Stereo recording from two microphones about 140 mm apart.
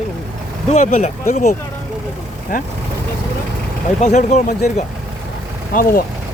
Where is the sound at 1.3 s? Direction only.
55° left (ahead or behind).